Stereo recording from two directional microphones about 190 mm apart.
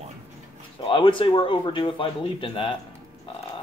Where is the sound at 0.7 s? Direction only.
25° left (ahead or behind).